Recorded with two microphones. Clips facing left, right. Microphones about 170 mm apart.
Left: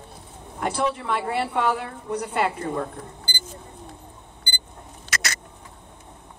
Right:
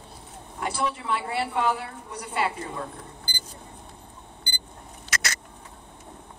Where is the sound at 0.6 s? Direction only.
50° left (ahead or behind).